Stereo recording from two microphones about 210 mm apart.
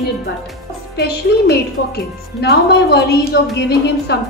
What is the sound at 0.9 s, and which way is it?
A woman's voice, 50° left (ahead or behind).